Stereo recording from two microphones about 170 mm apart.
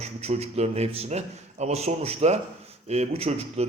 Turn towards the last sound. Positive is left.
turn(degrees=-35)  # may be behind; listen again after turning